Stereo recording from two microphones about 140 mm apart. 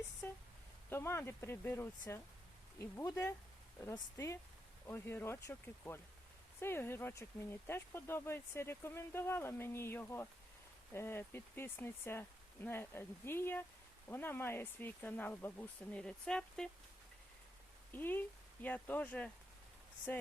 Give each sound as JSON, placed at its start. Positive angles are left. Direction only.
{"t": 0.2, "sound": "a sound", "side_deg": 15}
{"t": 0.9, "sound": "speech", "side_deg": 20}
{"t": 4.9, "sound": "speech", "side_deg": 15}
{"t": 17.9, "sound": "speech", "side_deg": 15}